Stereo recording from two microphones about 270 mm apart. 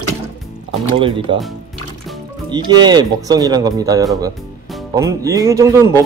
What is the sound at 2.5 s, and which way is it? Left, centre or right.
Speech, centre.